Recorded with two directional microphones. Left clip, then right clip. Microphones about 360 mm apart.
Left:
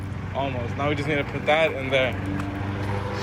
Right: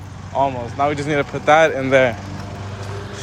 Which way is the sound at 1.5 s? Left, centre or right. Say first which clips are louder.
Right 9 dB; right.